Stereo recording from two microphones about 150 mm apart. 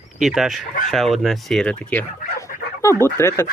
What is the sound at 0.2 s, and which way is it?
Speech, centre (ahead or behind).